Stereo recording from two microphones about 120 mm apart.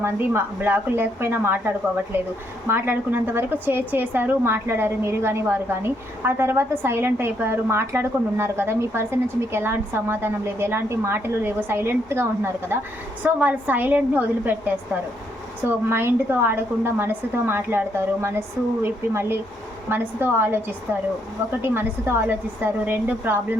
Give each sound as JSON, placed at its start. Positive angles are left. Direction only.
{"t": 0.0, "sound": "a woman's voice", "side_deg": -20}